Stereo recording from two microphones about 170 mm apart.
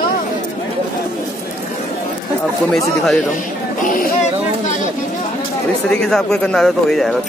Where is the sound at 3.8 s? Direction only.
55° left (ahead or behind).